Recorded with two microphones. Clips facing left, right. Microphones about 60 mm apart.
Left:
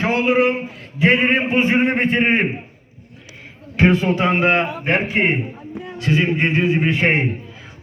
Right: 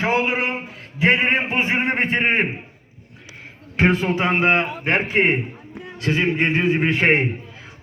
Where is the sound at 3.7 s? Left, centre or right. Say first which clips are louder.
Left 3 dB; right.